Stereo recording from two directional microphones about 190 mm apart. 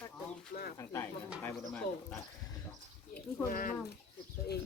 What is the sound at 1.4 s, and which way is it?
Bird, 10° left (ahead or behind).